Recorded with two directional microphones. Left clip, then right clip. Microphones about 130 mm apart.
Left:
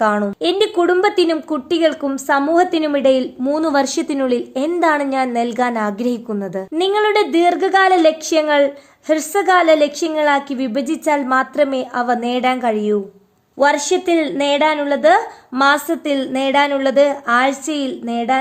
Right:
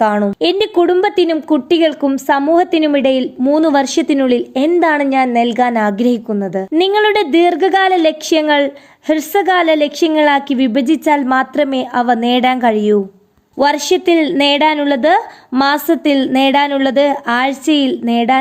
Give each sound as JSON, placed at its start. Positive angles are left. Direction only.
{"t": 0.0, "sound": "a woman's voice", "side_deg": -20}
{"t": 6.7, "sound": "a woman's voice", "side_deg": -25}